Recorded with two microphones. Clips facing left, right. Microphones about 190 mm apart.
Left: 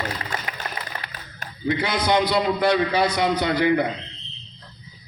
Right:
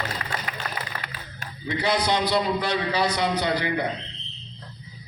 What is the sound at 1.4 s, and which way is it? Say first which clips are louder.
A man's voice: left 4 dB; 45° left (ahead or behind).